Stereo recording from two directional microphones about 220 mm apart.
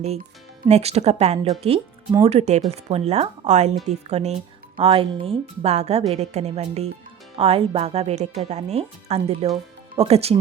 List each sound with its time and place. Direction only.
0.6 s speech: 30° right (ahead or behind)